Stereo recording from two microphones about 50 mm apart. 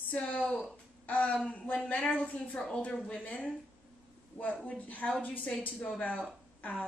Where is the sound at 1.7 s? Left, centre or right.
Left.